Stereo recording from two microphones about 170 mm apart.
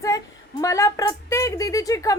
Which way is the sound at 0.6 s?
20° left (ahead or behind).